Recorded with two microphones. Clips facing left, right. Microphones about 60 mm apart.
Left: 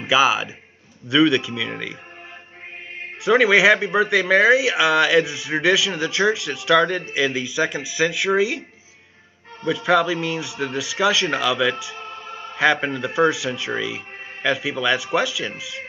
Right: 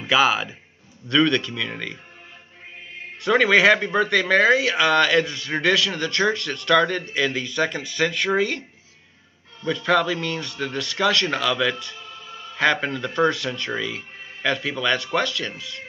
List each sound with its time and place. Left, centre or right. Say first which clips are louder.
0.0 s a man's voice: left 1 dB; centre
3.3 s speech: left 2 dB; centre
9.7 s speech: left 2 dB; centre
12.0 s music: left 5 dB; left
12.8 s speech: left 2 dB; centre